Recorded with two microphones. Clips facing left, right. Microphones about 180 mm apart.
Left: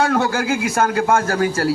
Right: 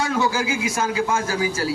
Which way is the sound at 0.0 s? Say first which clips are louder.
Left 4 dB; 60° left (ahead or behind).